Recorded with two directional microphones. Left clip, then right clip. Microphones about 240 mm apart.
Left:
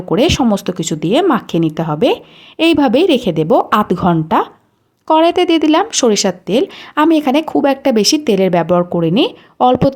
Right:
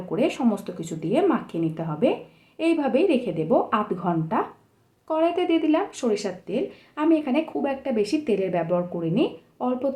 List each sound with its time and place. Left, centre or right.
0.1 s speech: left